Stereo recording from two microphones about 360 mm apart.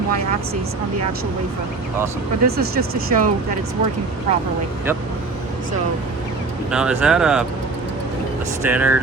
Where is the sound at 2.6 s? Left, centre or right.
Right.